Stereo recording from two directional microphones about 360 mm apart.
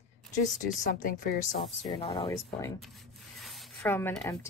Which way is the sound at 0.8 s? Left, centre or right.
Left.